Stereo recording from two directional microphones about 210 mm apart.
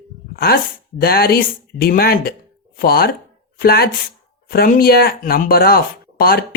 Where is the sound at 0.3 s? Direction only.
45° left (ahead or behind).